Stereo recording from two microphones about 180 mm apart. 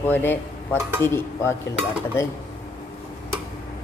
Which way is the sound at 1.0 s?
15° left (ahead or behind).